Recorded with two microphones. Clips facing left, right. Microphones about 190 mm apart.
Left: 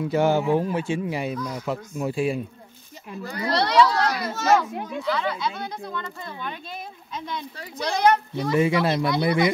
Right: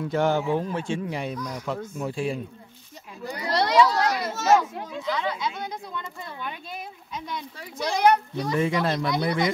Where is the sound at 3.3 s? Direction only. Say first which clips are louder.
Left 1 dB; 15° right (ahead or behind).